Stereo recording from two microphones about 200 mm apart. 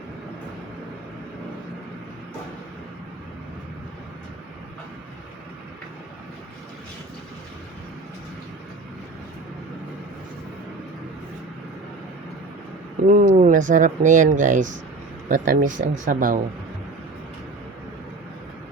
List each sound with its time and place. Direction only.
13.1 s speech: 35° right (ahead or behind)